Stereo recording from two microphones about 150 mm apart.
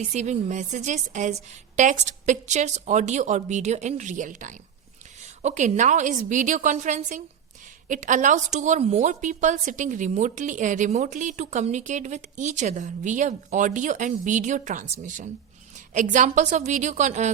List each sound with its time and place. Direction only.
0.0 s a woman's voice: 50° right (ahead or behind)